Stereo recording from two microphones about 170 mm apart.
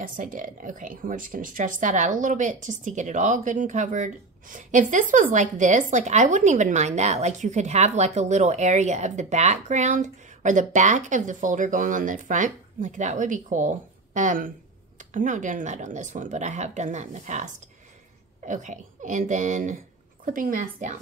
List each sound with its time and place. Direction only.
0.0 s speech: 50° right (ahead or behind)